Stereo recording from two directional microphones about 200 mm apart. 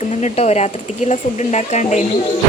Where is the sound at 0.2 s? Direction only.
35° left (ahead or behind).